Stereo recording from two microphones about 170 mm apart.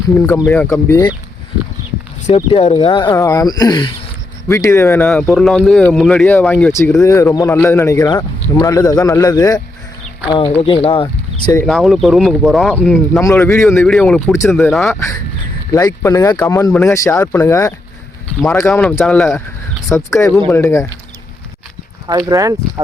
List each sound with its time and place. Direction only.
0.1 s speech: 15° left (ahead or behind)
2.2 s speech: 35° left (ahead or behind)
4.4 s speech: 15° left (ahead or behind); by 11.5 s 30° left (ahead or behind)
11.6 s speech: centre (ahead or behind)
14.9 s speech: 20° left (ahead or behind)
18.7 s speech: 5° left (ahead or behind)
22.3 s speech: 20° right (ahead or behind)